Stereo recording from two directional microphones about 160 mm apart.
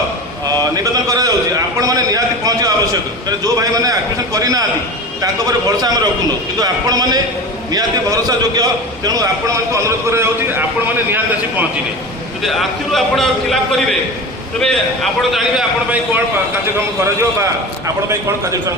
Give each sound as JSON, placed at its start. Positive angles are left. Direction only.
{"t": 0.6, "sound": "a sound", "side_deg": -25}
{"t": 5.2, "sound": "a man's voice", "side_deg": -25}
{"t": 12.4, "sound": "a man's voice", "side_deg": 0}
{"t": 14.6, "sound": "a man's voice", "side_deg": 5}
{"t": 17.0, "sound": "a man's voice", "side_deg": -20}